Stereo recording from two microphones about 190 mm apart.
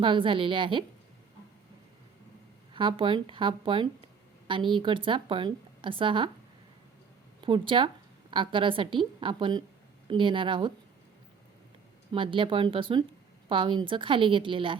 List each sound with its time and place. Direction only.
0.0 s a woman's voice: 25° right (ahead or behind)
2.7 s a woman's voice: 25° right (ahead or behind)
7.4 s a woman's voice: 25° right (ahead or behind)
12.1 s a woman's voice: 25° right (ahead or behind)